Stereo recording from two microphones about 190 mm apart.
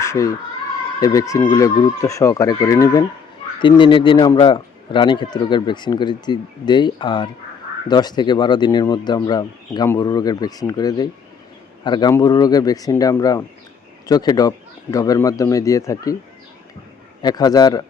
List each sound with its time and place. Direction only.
0.0 s speech: 15° left (ahead or behind)
17.2 s speech: 20° left (ahead or behind)